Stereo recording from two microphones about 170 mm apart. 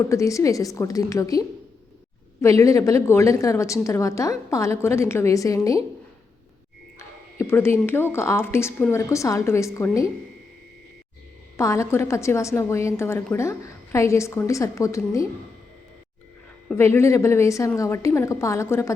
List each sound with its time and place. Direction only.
0.0 s a woman's voice: 15° left (ahead or behind)
7.3 s a sound: 15° left (ahead or behind)
7.9 s a woman's voice: 15° left (ahead or behind)
11.5 s a woman's voice: 15° left (ahead or behind)
16.7 s a woman's voice: 15° left (ahead or behind)